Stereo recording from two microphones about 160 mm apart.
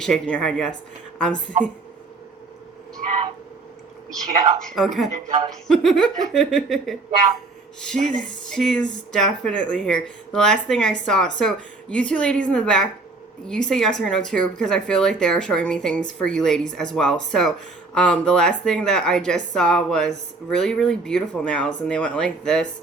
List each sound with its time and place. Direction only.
0.0 s speech: 5° left (ahead or behind)
1.5 s speech: 50° right (ahead or behind)
4.7 s speech: centre (ahead or behind)
5.1 s speech: 50° right (ahead or behind)
5.6 s speech: centre (ahead or behind)
7.9 s speech: 50° right (ahead or behind)
8.2 s speech: 5° left (ahead or behind)